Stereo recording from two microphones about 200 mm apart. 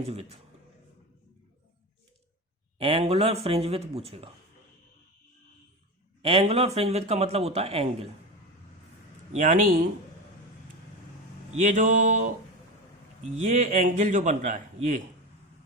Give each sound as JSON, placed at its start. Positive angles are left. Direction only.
{"t": 0.0, "sound": "a man's voice", "side_deg": -30}
{"t": 2.7, "sound": "speech", "side_deg": -30}
{"t": 6.2, "sound": "a man's voice", "side_deg": -30}
{"t": 9.3, "sound": "a man's voice", "side_deg": -35}
{"t": 11.6, "sound": "a man's voice", "side_deg": -40}
{"t": 13.3, "sound": "a man's voice", "side_deg": -35}